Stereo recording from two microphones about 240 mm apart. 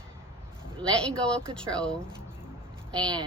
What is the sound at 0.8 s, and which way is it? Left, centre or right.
Speech, centre.